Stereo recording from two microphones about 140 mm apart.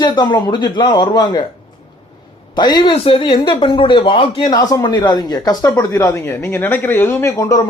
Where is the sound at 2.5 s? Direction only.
30° left (ahead or behind).